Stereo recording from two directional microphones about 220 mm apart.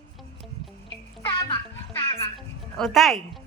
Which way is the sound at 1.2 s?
20° left (ahead or behind).